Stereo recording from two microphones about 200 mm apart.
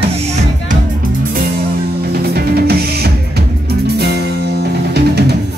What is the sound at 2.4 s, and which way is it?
Drum kit, 55° right (ahead or behind).